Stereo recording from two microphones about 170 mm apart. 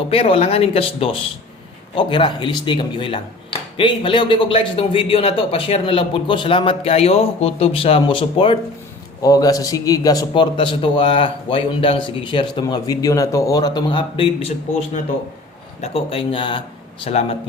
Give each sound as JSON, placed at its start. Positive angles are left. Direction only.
{"t": 0.1, "sound": "a man's voice", "side_deg": 35}